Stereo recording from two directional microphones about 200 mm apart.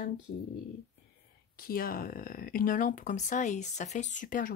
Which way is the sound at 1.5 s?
45° left (ahead or behind).